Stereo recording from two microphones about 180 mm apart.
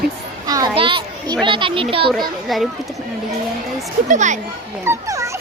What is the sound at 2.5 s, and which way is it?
Speech, centre (ahead or behind).